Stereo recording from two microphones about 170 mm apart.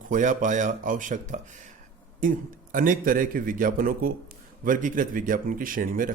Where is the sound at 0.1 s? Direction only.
50° right (ahead or behind).